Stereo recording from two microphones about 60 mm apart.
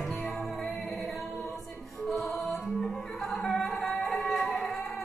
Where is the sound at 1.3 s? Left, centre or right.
Left.